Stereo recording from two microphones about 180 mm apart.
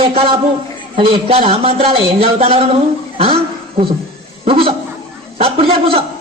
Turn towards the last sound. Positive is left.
turn(degrees=-30)  # may be behind; listen again after turning